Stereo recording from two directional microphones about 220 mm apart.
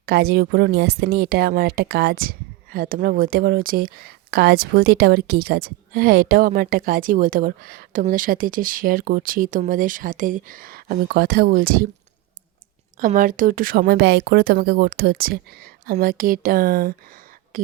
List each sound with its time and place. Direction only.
0.0 s a woman's voice: 45° right (ahead or behind)
13.0 s a woman's voice: 35° right (ahead or behind)